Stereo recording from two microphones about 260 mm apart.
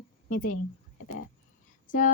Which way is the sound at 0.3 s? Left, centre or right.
Left.